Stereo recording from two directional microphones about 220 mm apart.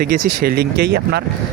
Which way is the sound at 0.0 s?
45° right (ahead or behind).